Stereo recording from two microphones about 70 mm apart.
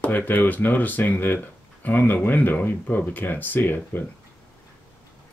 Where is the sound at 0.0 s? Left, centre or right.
Left.